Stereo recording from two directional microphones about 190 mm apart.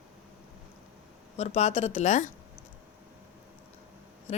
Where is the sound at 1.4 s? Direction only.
35° left (ahead or behind).